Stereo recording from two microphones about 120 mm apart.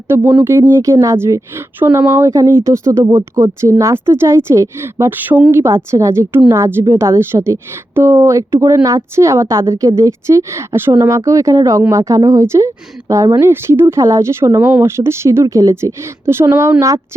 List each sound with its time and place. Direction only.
0.1 s speech: 15° right (ahead or behind)